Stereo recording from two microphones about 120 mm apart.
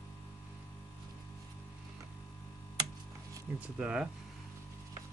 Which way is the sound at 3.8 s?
10° right (ahead or behind).